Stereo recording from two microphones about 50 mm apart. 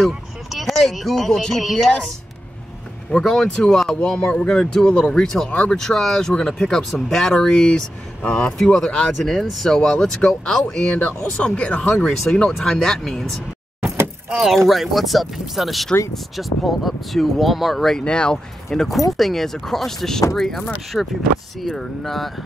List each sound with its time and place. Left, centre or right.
0.0 s speech: centre
3.1 s speech: centre
9.7 s speech: centre
10.7 s speech: left
12.3 s speech: centre
14.7 s speech: centre
17.7 s speech: centre
18.7 s speech: centre